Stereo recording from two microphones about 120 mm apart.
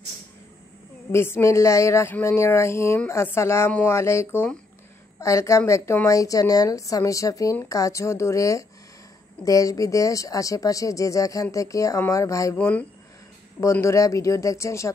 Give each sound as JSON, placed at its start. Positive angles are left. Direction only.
{"t": 1.1, "sound": "speech", "side_deg": 20}
{"t": 12.5, "sound": "speech", "side_deg": 10}
{"t": 13.6, "sound": "speech", "side_deg": 25}